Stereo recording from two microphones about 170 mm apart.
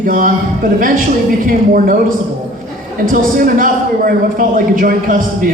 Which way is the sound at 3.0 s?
55° right (ahead or behind).